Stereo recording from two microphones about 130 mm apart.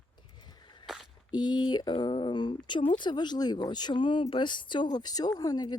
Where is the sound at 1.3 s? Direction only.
35° left (ahead or behind).